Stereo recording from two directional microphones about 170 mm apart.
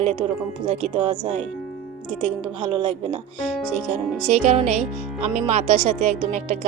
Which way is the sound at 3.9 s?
40° right (ahead or behind).